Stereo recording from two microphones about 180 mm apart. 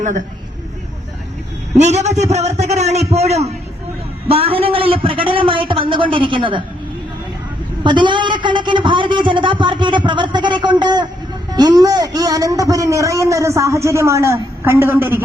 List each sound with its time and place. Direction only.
1.7 s a man's voice: 40° right (ahead or behind)
7.9 s a man's voice: 25° right (ahead or behind)